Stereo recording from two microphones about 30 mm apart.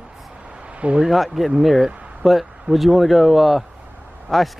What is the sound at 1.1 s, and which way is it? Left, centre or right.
Speech, centre.